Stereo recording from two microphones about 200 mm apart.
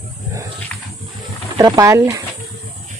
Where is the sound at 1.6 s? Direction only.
15° right (ahead or behind).